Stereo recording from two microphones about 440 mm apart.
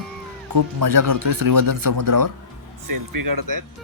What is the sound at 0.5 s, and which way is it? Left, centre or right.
Speech, right.